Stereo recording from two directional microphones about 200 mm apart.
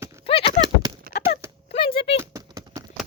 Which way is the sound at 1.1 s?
55° left (ahead or behind).